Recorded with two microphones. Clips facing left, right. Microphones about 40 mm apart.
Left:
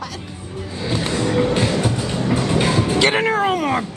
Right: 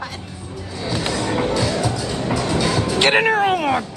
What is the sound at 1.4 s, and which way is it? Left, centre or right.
Music, left.